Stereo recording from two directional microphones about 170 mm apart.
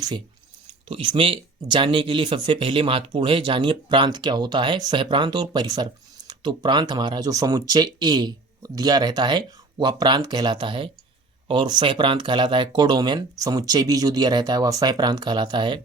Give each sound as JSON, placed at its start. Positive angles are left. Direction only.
{"t": 0.9, "sound": "speech", "side_deg": -30}